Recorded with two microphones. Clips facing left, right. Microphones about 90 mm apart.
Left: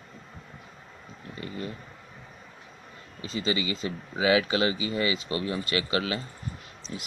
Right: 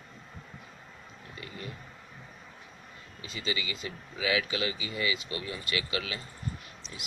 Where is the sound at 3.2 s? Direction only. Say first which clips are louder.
Left 7 dB; 35° left (ahead or behind).